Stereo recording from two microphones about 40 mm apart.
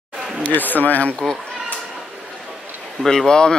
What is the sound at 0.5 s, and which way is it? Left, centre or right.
Speech, left.